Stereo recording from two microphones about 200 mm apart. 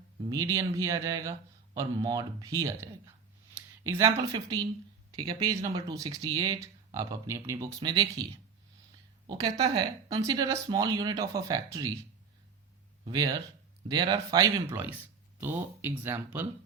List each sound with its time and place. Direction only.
0.3 s a man's voice: 15° right (ahead or behind)
13.1 s a man's voice: 20° right (ahead or behind)